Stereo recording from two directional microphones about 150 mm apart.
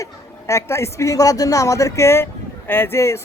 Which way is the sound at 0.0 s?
20° left (ahead or behind).